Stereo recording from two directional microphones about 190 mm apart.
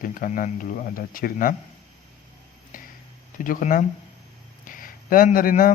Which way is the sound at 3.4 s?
45° left (ahead or behind).